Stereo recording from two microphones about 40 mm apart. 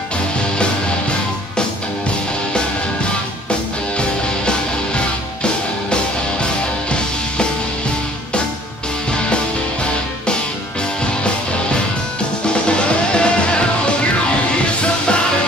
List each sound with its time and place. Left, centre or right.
4.0 s music: left
12.6 s music: left